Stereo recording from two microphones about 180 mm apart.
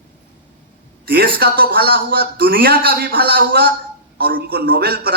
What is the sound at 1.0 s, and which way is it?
A man's voice, 60° right (ahead or behind).